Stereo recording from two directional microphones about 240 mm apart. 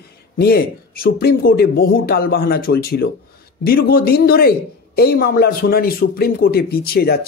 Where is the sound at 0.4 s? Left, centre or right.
Left.